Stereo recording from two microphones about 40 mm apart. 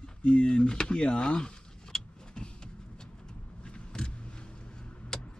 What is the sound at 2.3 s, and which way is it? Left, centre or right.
Vehicle, centre.